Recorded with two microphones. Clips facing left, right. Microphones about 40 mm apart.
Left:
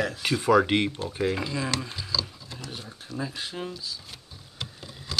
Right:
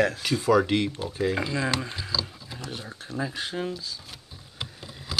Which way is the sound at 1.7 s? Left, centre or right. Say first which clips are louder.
Right 2 dB; centre.